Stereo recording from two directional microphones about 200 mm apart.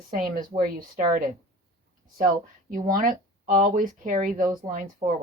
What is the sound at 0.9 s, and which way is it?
Speech, 40° right (ahead or behind).